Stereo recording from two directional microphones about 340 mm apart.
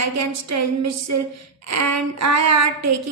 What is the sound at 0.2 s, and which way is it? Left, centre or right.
A woman's voice, right.